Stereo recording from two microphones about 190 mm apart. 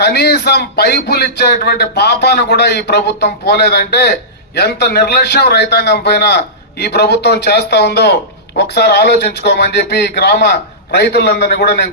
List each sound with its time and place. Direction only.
0.0 s a man's voice: 60° left (ahead or behind)